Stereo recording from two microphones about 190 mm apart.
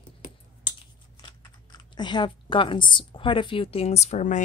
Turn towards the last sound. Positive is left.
turn(degrees=40)  # may be behind; listen again after turning